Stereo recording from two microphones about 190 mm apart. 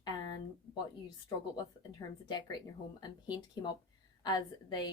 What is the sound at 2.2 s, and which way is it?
A woman's voice, 20° left (ahead or behind).